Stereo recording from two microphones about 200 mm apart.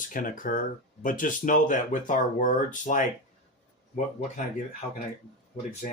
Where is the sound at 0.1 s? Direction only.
45° left (ahead or behind).